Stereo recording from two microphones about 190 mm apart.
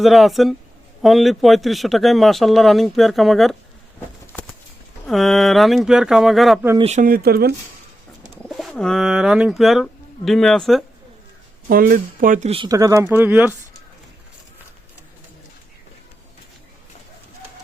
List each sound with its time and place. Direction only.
0.0 s speech: centre (ahead or behind)
5.0 s speech: centre (ahead or behind)
6.7 s speech: 35° right (ahead or behind); by 7.5 s 55° right (ahead or behind)
8.4 s speech: centre (ahead or behind)
11.7 s speech: 50° right (ahead or behind)
12.5 s speech: 30° right (ahead or behind)
12.7 s speech: 15° right (ahead or behind)